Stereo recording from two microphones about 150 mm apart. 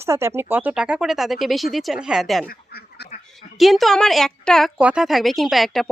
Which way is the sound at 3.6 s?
Centre (ahead or behind).